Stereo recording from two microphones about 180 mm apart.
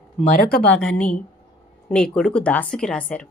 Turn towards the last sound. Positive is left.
turn(degrees=5)  # may be behind; listen again after turning